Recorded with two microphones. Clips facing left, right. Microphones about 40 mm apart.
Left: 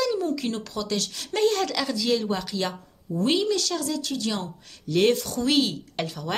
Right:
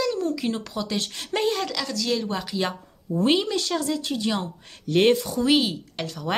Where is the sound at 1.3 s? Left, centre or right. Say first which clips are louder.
Left 2 dB; centre.